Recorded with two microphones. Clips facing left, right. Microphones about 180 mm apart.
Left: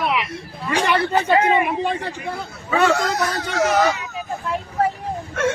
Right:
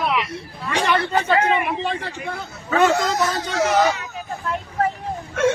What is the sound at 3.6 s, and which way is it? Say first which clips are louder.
Speech: even; centre (ahead or behind).